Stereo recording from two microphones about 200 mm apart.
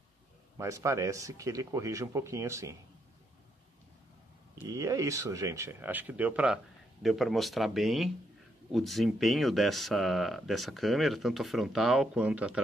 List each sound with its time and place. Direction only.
0.6 s speech: 15° right (ahead or behind)
4.6 s speech: 15° right (ahead or behind)